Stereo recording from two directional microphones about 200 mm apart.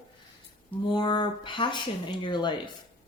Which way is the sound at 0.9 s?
20° left (ahead or behind).